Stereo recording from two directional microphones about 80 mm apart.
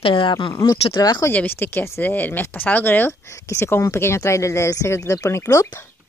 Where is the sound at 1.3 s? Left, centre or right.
Left.